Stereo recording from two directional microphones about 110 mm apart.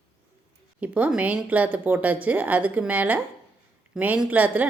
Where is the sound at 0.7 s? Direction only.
10° right (ahead or behind).